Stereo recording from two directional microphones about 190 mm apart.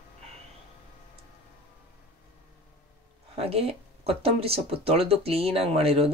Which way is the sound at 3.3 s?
30° right (ahead or behind).